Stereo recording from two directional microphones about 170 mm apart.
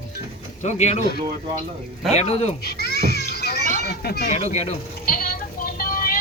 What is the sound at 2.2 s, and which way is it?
Speech, 40° left (ahead or behind).